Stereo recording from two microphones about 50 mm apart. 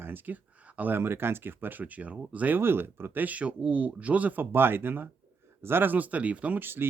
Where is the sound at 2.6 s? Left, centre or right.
Right.